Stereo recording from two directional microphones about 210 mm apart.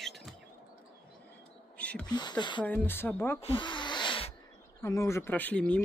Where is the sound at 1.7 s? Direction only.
5° left (ahead or behind).